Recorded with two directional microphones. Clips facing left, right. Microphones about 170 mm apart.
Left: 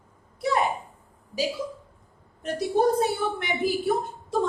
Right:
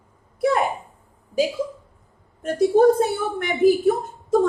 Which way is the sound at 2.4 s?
50° right (ahead or behind).